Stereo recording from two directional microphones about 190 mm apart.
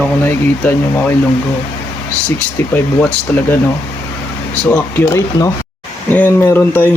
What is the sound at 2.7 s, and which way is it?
Speech, 10° left (ahead or behind).